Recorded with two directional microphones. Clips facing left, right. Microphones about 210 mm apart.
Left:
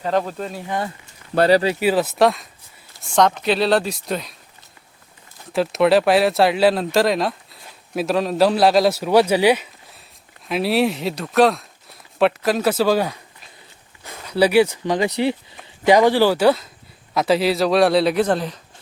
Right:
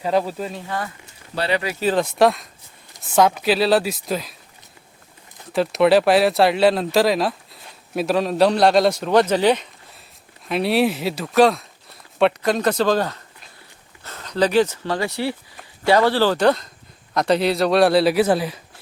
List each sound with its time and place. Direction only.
0.0 s speech: 10° right (ahead or behind)
1.4 s speech: 40° left (ahead or behind)
1.8 s a man's voice: 5° left (ahead or behind)
5.5 s a man's voice: centre (ahead or behind)